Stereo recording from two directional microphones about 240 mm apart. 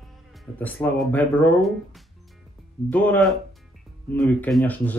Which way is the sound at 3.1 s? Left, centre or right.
Centre.